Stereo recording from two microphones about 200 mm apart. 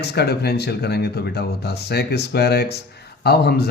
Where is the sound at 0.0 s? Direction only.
55° left (ahead or behind).